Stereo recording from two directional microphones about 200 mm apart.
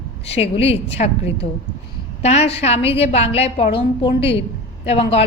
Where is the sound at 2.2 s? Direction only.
30° left (ahead or behind).